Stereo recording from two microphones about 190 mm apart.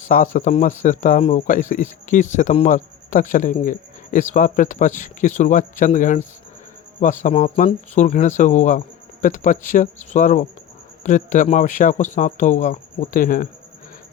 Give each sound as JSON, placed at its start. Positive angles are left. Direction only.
{"t": 0.1, "sound": "a man's voice", "side_deg": 45}